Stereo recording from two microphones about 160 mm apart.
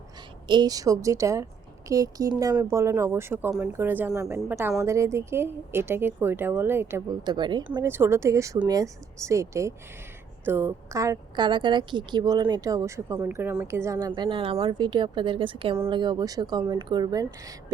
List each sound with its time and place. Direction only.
0.4 s a woman's voice: 25° right (ahead or behind)
7.3 s a woman's voice: 30° right (ahead or behind)
7.8 s a woman's voice: 15° right (ahead or behind)
14.1 s a woman's voice: 30° right (ahead or behind)